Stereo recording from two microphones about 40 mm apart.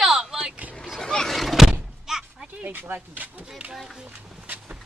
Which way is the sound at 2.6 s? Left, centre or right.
Right.